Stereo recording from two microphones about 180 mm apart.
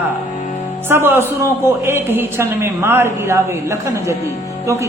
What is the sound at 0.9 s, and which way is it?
A man's voice, 10° right (ahead or behind).